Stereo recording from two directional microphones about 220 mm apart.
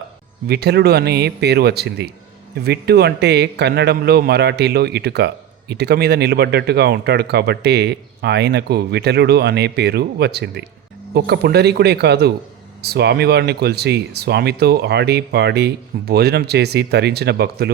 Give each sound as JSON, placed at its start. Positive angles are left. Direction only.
{"t": 0.4, "sound": "speech", "side_deg": -50}